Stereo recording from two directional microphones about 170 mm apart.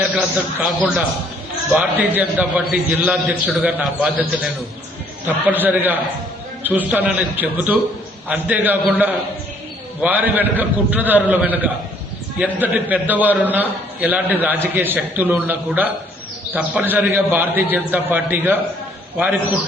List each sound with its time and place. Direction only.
0.2 s a man's voice: 5° right (ahead or behind)
5.5 s a man's voice: 10° right (ahead or behind)